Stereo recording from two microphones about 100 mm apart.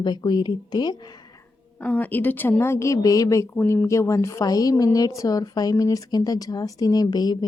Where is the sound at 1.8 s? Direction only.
15° left (ahead or behind).